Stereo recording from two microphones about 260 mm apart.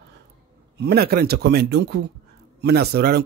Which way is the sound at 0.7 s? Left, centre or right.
Right.